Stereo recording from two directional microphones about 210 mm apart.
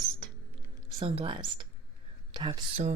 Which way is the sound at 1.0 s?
25° right (ahead or behind).